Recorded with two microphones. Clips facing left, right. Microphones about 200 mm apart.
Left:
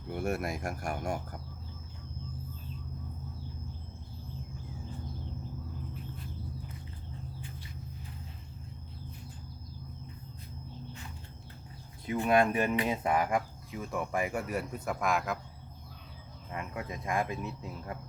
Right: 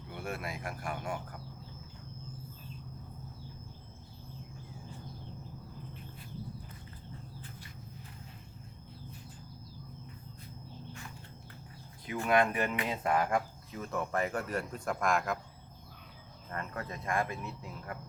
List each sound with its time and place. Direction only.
0.1 s a sound: 45° left (ahead or behind)
0.6 s speech: 45° left (ahead or behind)
12.0 s speech: 20° left (ahead or behind); by 15.4 s centre (ahead or behind)
16.5 s speech: 10° left (ahead or behind)